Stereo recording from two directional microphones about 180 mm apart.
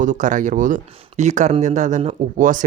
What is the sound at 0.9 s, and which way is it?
Speech, 30° right (ahead or behind).